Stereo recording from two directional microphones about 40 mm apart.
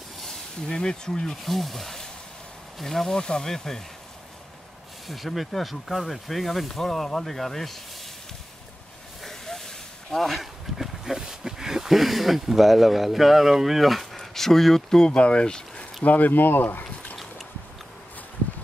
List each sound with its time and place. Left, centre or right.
0.7 s speech: centre
1.3 s speech: centre
3.2 s speech: centre
5.0 s speech: centre
9.2 s a sound: centre
14.1 s speech: centre; by 15.8 s left
16.0 s speech: left